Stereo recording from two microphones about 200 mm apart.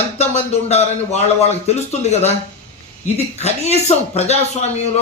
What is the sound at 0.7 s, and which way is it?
A man's voice, 35° left (ahead or behind).